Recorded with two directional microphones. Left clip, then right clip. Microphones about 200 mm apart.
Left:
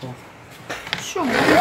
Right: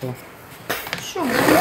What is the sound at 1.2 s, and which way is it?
Zipper, 30° left (ahead or behind).